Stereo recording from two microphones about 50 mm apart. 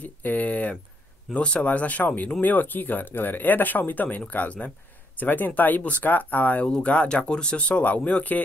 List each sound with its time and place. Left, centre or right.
0.0 s a sound: left
1.3 s speech: left
6.6 s speech: left